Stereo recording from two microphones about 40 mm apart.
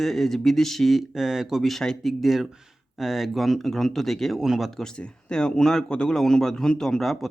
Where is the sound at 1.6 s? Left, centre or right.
Centre.